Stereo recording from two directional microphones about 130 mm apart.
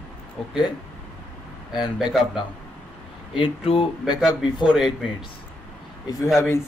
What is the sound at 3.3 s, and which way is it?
Speech, 45° left (ahead or behind).